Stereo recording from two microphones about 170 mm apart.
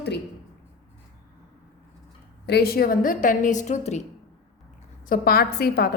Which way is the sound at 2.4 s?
70° left (ahead or behind).